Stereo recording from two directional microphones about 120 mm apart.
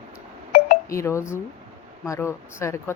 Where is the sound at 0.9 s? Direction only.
25° left (ahead or behind).